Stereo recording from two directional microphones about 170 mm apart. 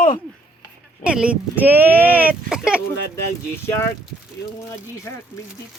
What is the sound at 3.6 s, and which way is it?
Speech, 15° left (ahead or behind).